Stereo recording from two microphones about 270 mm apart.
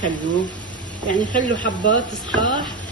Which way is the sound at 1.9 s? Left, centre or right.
Centre.